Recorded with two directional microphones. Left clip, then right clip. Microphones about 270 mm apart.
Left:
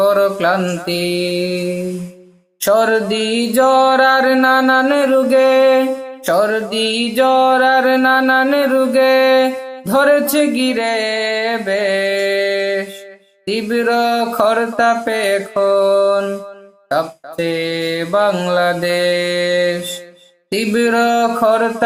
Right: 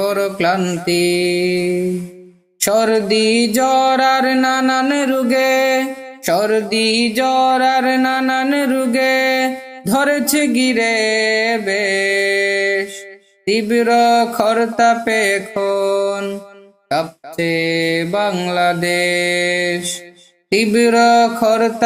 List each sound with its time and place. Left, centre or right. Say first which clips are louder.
0.0 s music: left 4 dB; right
2.6 s music: left 2 dB; right